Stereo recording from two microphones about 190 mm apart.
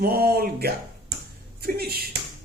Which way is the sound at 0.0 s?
55° right (ahead or behind).